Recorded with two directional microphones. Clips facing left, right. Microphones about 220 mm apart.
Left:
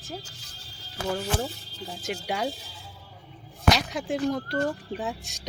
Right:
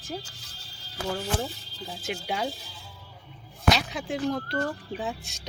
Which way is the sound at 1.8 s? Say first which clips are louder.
Left 1 dB; centre (ahead or behind).